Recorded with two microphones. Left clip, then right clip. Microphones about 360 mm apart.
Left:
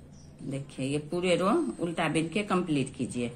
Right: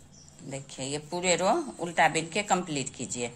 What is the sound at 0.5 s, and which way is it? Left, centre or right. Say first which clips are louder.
A woman's voice: left 2 dB; centre.